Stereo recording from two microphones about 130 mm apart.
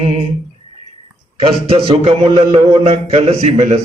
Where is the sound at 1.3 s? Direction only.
50° right (ahead or behind).